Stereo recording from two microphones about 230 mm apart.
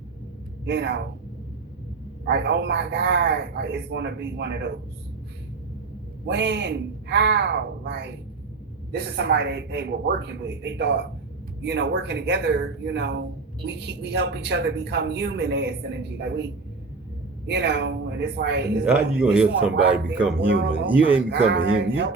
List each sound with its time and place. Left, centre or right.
0.6 s speech: right
2.2 s a man's voice: right
6.2 s a man's voice: right
18.9 s a man's voice: centre
21.2 s a man's voice: right